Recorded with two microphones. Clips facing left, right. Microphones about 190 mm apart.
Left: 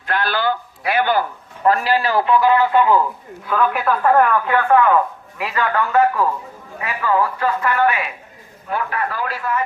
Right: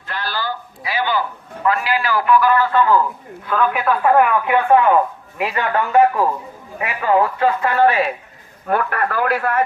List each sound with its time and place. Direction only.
0.1 s a man's voice: 60° left (ahead or behind)
1.6 s a man's voice: 35° left (ahead or behind); by 3.0 s 15° left (ahead or behind)
3.4 s speech: centre (ahead or behind); by 8.1 s 35° right (ahead or behind)
8.6 s a man's voice: 55° right (ahead or behind)